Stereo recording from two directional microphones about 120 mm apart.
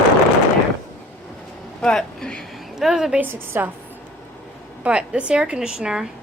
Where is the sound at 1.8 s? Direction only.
5° left (ahead or behind).